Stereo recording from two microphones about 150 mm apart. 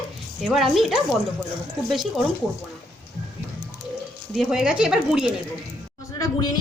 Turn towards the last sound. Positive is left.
turn(degrees=25)  # may be behind; listen again after turning